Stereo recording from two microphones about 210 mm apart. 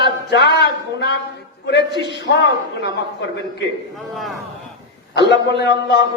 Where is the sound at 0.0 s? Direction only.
55° left (ahead or behind).